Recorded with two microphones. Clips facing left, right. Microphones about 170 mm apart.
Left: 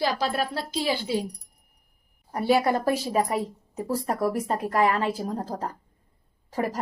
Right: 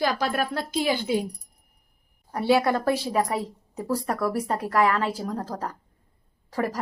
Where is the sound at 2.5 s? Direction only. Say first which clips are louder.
Even; 20° left (ahead or behind).